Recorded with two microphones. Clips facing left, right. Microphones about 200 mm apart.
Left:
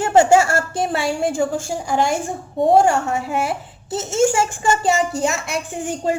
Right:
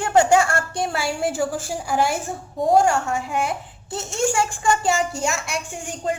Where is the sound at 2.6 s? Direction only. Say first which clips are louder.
Left 3 dB; 25° left (ahead or behind).